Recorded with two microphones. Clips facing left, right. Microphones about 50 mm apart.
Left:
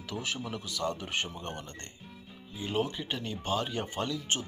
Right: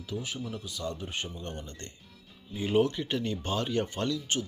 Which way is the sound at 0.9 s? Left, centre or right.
Left.